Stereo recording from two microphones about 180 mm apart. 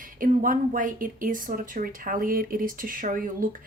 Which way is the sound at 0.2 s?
50° right (ahead or behind).